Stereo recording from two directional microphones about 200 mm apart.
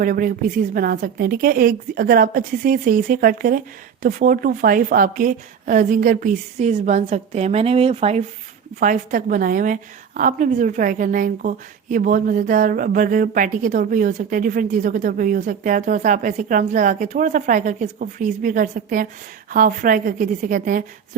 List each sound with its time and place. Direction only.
0.0 s a woman's voice: 45° right (ahead or behind)
8.8 s a woman's voice: 40° right (ahead or behind)